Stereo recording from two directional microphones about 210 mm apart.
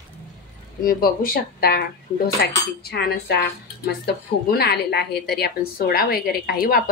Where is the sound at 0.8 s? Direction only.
45° left (ahead or behind).